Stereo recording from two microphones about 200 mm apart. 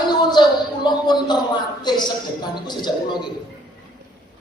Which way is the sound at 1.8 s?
20° left (ahead or behind).